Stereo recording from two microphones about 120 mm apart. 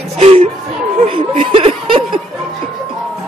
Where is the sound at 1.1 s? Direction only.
50° right (ahead or behind).